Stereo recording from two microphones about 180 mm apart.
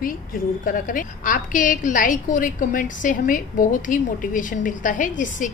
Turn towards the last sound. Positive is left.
turn(degrees=45)  # may be behind; listen again after turning